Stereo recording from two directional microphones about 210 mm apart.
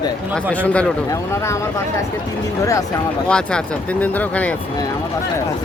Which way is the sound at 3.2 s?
5° left (ahead or behind).